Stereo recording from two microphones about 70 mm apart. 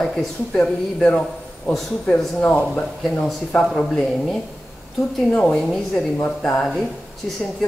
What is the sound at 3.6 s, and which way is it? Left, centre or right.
A woman's voice, centre.